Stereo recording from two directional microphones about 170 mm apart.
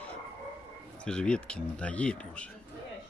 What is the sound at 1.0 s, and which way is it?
Speech, 5° left (ahead or behind).